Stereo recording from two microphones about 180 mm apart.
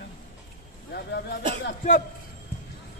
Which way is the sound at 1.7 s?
45° left (ahead or behind).